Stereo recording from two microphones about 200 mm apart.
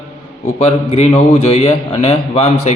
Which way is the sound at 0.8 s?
30° left (ahead or behind).